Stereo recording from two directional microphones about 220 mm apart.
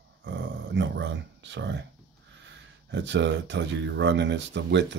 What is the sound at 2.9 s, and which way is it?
Speech, 55° right (ahead or behind).